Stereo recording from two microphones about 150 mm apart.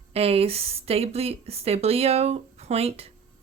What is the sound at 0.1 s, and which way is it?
A woman's voice, 40° right (ahead or behind).